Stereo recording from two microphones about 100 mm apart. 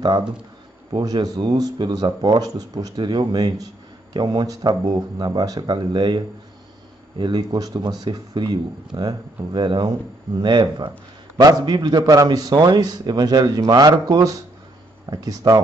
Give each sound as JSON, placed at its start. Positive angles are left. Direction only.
{"t": 0.9, "sound": "a man's voice", "side_deg": -45}